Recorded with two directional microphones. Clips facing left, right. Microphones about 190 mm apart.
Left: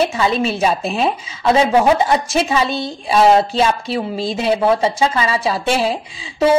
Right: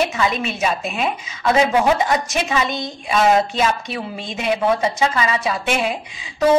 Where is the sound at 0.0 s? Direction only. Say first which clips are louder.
Left 4 dB; 30° left (ahead or behind).